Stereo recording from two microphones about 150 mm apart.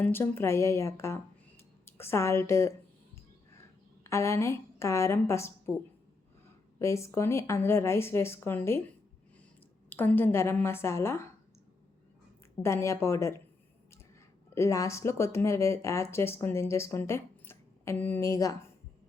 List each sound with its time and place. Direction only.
0.0 s speech: 15° left (ahead or behind)
4.0 s a woman's voice: 20° left (ahead or behind)
6.7 s speech: 20° left (ahead or behind)
9.9 s speech: 15° left (ahead or behind)
12.6 s a woman's voice: 20° left (ahead or behind)
14.5 s speech: 20° left (ahead or behind)